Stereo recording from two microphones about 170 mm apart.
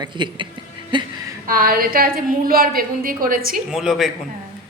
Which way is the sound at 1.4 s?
60° right (ahead or behind).